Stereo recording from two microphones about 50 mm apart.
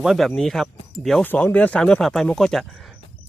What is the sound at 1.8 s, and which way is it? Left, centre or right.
Speech, centre.